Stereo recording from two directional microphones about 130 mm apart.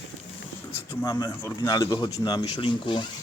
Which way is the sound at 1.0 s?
25° left (ahead or behind).